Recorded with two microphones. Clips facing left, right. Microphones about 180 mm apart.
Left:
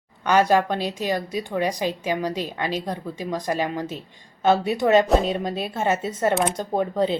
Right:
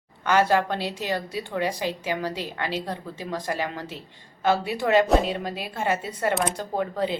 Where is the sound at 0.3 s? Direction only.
15° left (ahead or behind).